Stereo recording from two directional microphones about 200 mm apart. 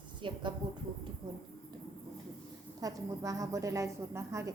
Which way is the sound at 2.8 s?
15° right (ahead or behind).